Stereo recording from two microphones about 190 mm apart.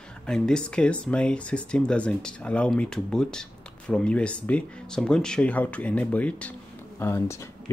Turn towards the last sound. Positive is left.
turn(degrees=15)  # may be behind; listen again after turning